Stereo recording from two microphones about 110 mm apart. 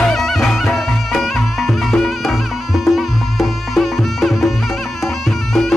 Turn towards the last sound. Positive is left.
turn(degrees=0)  # may be behind; listen again after turning